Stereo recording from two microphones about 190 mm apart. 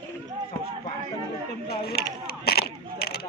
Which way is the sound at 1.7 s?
55° left (ahead or behind).